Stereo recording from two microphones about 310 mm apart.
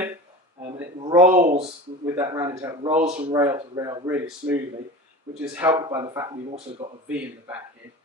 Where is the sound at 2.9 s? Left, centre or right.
Right; by 7.6 s centre.